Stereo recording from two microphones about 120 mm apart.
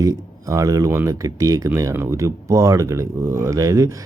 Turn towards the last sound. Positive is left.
turn(degrees=-25)  # may be behind; listen again after turning